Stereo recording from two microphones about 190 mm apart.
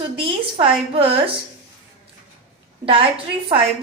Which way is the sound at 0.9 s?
30° right (ahead or behind).